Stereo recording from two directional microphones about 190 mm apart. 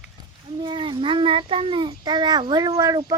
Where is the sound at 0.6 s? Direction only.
25° right (ahead or behind).